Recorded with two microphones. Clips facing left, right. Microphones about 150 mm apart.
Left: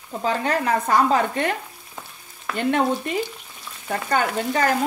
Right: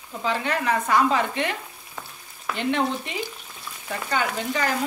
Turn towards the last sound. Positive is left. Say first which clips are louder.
# left 4 dB
turn(degrees=45)  # may be behind; listen again after turning